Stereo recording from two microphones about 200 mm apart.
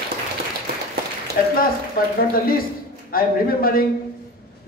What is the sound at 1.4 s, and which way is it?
A man's voice, 45° left (ahead or behind).